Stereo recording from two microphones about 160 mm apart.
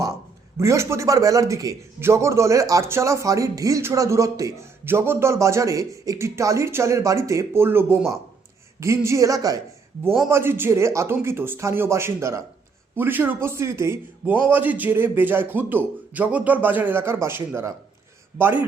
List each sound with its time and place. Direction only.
0.5 s a man's voice: 15° right (ahead or behind)